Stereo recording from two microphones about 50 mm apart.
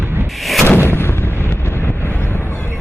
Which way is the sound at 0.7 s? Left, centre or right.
Left.